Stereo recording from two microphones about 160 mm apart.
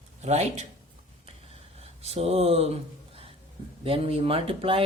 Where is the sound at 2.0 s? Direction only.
40° right (ahead or behind).